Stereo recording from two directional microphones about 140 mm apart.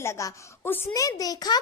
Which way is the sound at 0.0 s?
20° left (ahead or behind).